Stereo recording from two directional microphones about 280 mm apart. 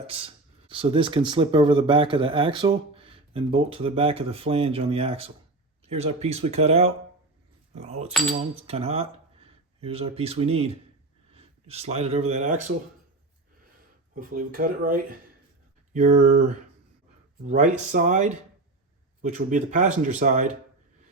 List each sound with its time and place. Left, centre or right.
0.1 s speech: centre
11.3 s a sound: right
12.3 s speech: right
14.2 s speech: right